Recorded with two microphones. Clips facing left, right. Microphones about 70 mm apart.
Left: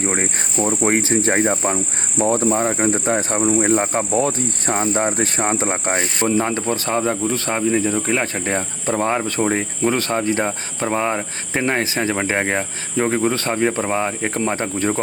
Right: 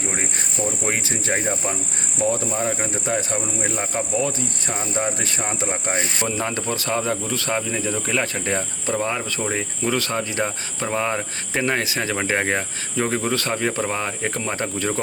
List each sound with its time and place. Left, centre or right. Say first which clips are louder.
0.0 s speech: left 5 dB; left
6.1 s speech: left 6 dB; left
12.1 s speech: right 1 dB; centre